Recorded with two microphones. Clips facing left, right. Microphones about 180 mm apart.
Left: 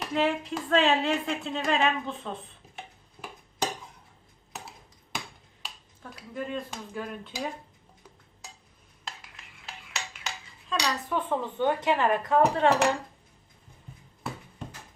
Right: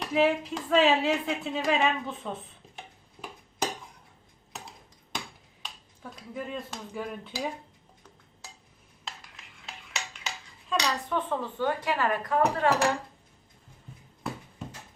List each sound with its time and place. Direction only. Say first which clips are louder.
0.0 s speech: right 2 dB; 5° right (ahead or behind)
2.7 s tick-tock: left 2 dB; centre (ahead or behind)
4.5 s a sound: left 1 dB; centre (ahead or behind)
6.1 s speech: left 2 dB; centre (ahead or behind)
9.0 s dishes: left 1 dB; centre (ahead or behind)
11.3 s a woman's voice: left 5 dB; 20° left (ahead or behind)
14.6 s a sound: even; centre (ahead or behind)